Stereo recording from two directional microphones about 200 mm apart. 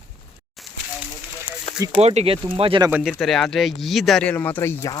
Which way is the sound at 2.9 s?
5° right (ahead or behind).